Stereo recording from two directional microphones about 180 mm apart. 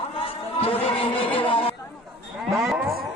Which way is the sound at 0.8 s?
30° left (ahead or behind).